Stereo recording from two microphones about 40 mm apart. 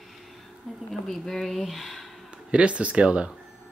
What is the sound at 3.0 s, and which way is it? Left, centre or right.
Speech, right.